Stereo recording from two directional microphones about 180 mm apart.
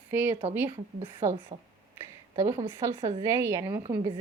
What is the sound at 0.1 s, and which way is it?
A woman's voice, 10° right (ahead or behind).